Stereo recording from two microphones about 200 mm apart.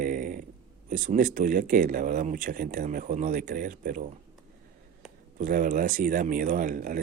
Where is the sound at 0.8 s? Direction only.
40° right (ahead or behind).